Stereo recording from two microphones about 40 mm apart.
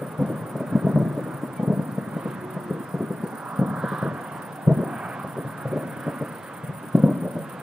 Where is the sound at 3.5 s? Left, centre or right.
Right.